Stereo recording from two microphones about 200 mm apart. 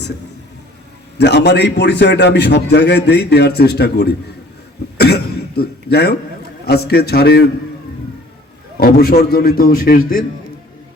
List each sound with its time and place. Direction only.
1.2 s a man's voice: 55° left (ahead or behind)
4.9 s cough: 55° left (ahead or behind)
6.7 s a man's voice: 50° left (ahead or behind)
8.8 s a man's voice: 50° left (ahead or behind)